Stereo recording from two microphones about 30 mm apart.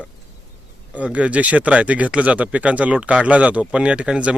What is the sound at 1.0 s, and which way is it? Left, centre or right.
Speech, right.